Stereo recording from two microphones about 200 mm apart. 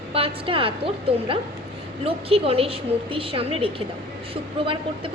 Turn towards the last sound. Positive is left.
turn(degrees=-25)  # may be behind; listen again after turning